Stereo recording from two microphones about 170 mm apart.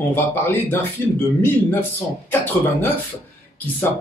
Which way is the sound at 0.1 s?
10° left (ahead or behind).